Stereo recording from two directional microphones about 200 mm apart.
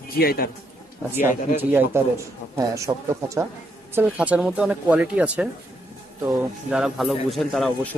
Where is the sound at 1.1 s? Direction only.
10° right (ahead or behind).